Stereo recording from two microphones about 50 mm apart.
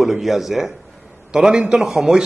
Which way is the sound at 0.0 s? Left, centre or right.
Centre.